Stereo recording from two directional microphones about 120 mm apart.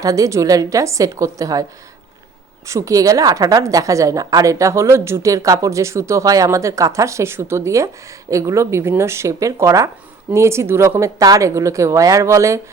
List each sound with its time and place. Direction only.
0.0 s a woman's voice: 30° right (ahead or behind)
2.6 s a woman's voice: 25° right (ahead or behind)